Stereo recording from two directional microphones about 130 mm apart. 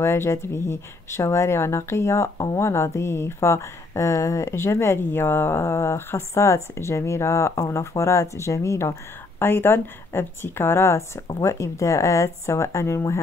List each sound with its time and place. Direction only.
0.0 s a woman's voice: 20° left (ahead or behind)